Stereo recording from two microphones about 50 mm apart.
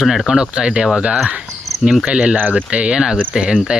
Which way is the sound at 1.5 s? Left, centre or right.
Centre.